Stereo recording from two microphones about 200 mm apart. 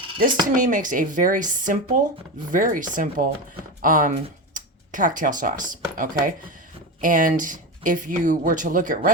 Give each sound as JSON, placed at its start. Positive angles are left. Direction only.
{"t": 0.2, "sound": "speech", "side_deg": -45}